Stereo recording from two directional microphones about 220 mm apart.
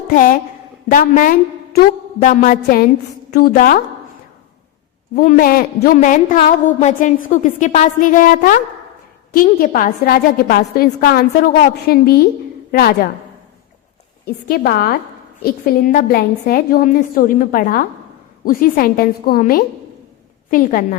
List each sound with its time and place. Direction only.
0.9 s a woman's voice: 35° left (ahead or behind)
5.1 s a woman's voice: 40° left (ahead or behind)
14.3 s a woman's voice: 45° left (ahead or behind)